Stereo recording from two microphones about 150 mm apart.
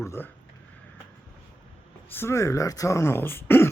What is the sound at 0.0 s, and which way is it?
Speech, 20° left (ahead or behind).